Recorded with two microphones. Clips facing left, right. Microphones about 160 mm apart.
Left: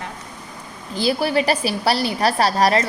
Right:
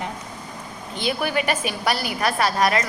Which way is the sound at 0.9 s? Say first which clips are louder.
Left 5 dB; 35° left (ahead or behind).